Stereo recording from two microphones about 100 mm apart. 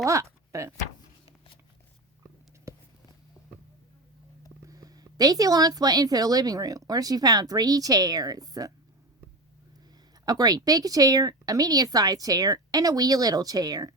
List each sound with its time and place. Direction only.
0.0 s speech: 30° right (ahead or behind)
2.7 s a sound: 30° right (ahead or behind)
4.6 s a woman's voice: 35° right (ahead or behind)
10.2 s a woman's voice: 40° right (ahead or behind)